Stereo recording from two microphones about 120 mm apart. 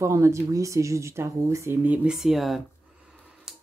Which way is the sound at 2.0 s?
5° right (ahead or behind).